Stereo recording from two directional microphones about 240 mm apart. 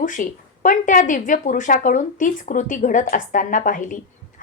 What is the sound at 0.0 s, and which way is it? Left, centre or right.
Speech, left.